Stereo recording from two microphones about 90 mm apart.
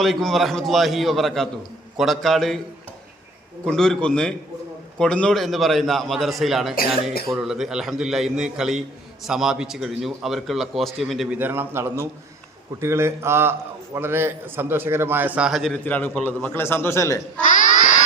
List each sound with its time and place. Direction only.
0.0 s speech: centre (ahead or behind)
3.7 s a man's voice: 5° left (ahead or behind)
5.4 s speech: centre (ahead or behind)
11.3 s a man's voice: 20° right (ahead or behind)
15.4 s speech: 5° right (ahead or behind)
15.7 s a man's voice: 20° left (ahead or behind)